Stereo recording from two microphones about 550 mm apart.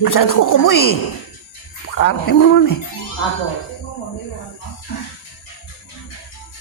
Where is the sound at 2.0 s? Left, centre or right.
Left.